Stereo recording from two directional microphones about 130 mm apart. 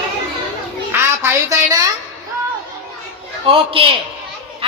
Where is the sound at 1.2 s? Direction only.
20° right (ahead or behind).